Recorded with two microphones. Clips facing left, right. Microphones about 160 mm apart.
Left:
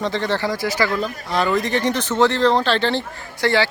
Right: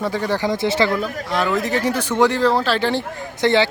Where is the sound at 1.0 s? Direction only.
Centre (ahead or behind).